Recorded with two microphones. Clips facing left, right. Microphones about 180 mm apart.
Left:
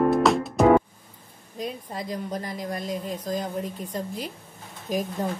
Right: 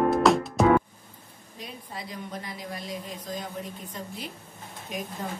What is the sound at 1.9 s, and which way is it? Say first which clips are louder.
A woman's voice: left 6 dB; 45° left (ahead or behind).